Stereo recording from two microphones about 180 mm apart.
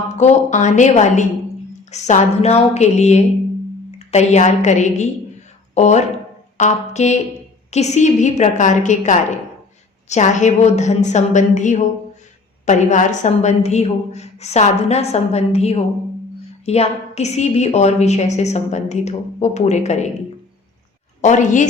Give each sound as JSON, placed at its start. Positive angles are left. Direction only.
{"t": 0.2, "sound": "a woman's voice", "side_deg": 40}
{"t": 21.2, "sound": "a woman's voice", "side_deg": 40}